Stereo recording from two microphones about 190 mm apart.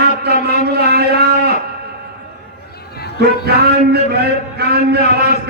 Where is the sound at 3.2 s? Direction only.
55° right (ahead or behind).